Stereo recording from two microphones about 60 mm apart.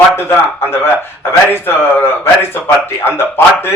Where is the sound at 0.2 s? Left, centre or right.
Left.